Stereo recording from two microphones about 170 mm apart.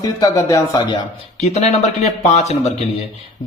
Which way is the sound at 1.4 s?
40° left (ahead or behind).